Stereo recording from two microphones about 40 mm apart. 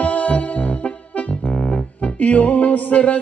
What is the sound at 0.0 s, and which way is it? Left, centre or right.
Music, left.